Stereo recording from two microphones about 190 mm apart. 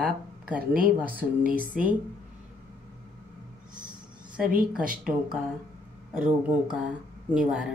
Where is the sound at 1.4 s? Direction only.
45° right (ahead or behind).